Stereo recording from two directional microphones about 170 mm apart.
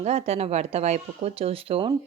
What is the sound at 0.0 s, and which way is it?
A woman's voice, 40° right (ahead or behind).